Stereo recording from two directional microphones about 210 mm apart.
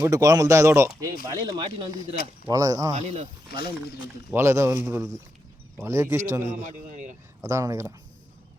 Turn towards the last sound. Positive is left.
turn(degrees=-15)  # may be behind; listen again after turning